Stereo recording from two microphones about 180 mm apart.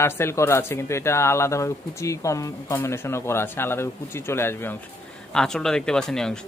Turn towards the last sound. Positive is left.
turn(degrees=5)  # may be behind; listen again after turning